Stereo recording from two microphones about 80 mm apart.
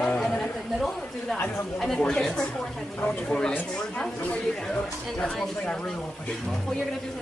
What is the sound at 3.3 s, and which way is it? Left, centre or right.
Speech, centre.